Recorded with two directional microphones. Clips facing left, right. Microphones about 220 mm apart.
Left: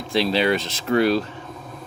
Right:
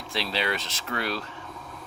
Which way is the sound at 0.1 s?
20° left (ahead or behind).